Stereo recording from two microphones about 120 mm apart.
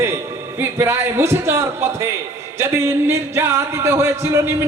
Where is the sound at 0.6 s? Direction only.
20° right (ahead or behind).